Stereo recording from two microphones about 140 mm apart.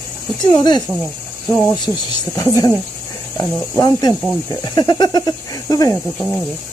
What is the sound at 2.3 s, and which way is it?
Speech, 25° left (ahead or behind).